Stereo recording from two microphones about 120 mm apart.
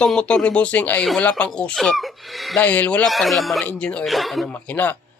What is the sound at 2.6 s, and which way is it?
Speech, 10° left (ahead or behind).